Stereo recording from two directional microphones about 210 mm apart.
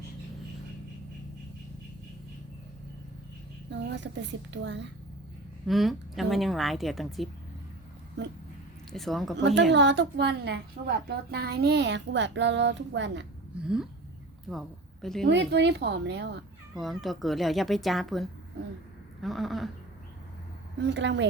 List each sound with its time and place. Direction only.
3.7 s a woman's voice: 60° right (ahead or behind)
5.6 s speech: centre (ahead or behind)
8.9 s speech: centre (ahead or behind)
9.7 s a woman's voice: 55° right (ahead or behind)
13.5 s speech: 5° right (ahead or behind)
15.0 s speech: centre (ahead or behind)
15.3 s speech: 55° right (ahead or behind)
16.7 s speech: centre (ahead or behind)
20.8 s a woman's voice: 55° right (ahead or behind)